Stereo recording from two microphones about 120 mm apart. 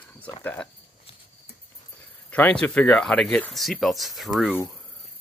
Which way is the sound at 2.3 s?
10° left (ahead or behind).